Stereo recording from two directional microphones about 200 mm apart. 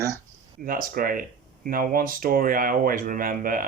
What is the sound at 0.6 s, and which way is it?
Speech, 45° right (ahead or behind).